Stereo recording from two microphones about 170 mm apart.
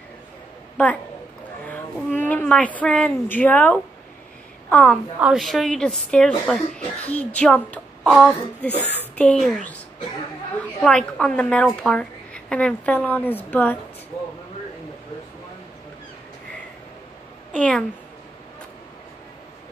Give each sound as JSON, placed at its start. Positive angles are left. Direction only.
{"t": 1.7, "sound": "a woman's voice", "side_deg": 10}
{"t": 10.8, "sound": "a woman's voice", "side_deg": 5}
{"t": 17.5, "sound": "a woman's voice", "side_deg": 5}